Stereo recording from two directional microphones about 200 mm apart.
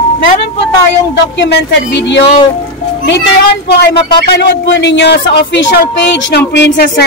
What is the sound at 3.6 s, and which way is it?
A woman's voice, 55° left (ahead or behind).